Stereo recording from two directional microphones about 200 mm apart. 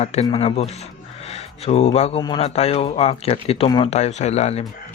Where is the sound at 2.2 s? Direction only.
25° left (ahead or behind).